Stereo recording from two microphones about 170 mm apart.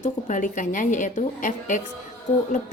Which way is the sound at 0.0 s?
50° left (ahead or behind).